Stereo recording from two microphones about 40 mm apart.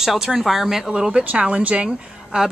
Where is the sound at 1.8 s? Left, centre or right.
Centre.